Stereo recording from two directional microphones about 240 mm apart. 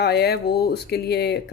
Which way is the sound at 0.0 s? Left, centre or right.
Left.